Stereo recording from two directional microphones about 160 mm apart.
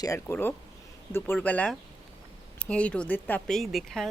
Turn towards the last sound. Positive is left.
turn(degrees=0)  # may be behind; listen again after turning